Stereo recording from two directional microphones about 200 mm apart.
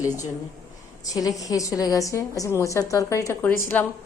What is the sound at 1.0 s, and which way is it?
A woman's voice, 15° left (ahead or behind).